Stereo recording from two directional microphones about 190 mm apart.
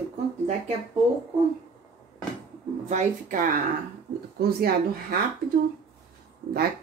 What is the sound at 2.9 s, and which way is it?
Speech, 40° right (ahead or behind).